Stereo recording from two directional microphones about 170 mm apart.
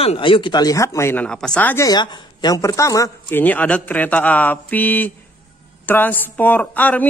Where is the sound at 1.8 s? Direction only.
25° left (ahead or behind).